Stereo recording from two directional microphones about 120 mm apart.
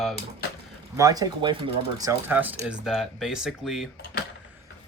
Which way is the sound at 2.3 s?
15° right (ahead or behind).